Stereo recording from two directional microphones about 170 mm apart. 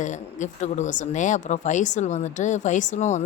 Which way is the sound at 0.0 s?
45° left (ahead or behind).